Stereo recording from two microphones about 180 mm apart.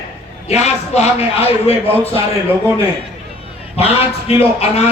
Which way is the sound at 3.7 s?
35° left (ahead or behind).